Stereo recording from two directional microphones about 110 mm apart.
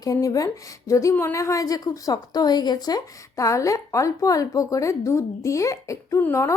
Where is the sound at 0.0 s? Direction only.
30° left (ahead or behind).